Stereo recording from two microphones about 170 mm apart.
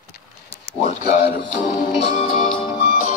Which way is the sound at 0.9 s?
60° left (ahead or behind).